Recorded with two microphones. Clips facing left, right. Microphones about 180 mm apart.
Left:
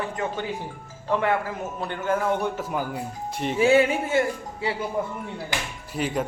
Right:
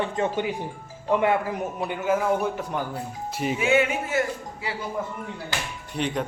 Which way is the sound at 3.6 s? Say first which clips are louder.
Left 5 dB; 35° left (ahead or behind).